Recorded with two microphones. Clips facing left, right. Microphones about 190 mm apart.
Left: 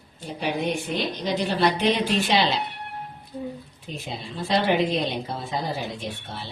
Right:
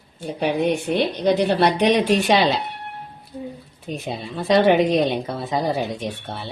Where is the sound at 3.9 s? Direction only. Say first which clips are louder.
Right 6 dB; 60° right (ahead or behind).